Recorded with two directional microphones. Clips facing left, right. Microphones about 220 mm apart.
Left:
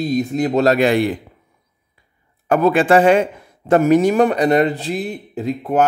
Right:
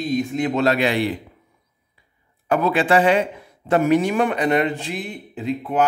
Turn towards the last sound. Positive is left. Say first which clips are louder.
# left 3 dB
turn(degrees=45)  # may be behind; listen again after turning